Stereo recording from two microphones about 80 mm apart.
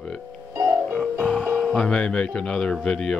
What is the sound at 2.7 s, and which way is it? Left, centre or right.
Speech, centre.